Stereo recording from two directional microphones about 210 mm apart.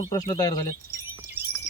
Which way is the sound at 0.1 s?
20° left (ahead or behind).